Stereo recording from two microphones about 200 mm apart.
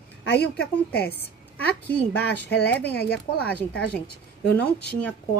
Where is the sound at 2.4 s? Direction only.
55° left (ahead or behind).